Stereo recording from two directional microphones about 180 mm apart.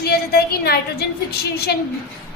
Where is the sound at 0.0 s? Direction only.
60° left (ahead or behind).